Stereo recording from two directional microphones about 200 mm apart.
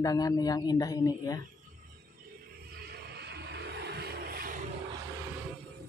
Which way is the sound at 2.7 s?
50° right (ahead or behind).